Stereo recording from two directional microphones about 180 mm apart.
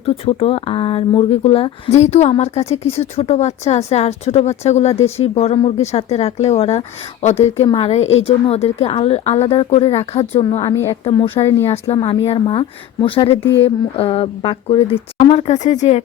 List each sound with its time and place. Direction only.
0.0 s a woman's voice: 35° left (ahead or behind)